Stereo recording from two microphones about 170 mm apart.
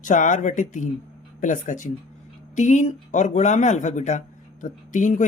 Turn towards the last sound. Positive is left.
turn(degrees=45)  # may be behind; listen again after turning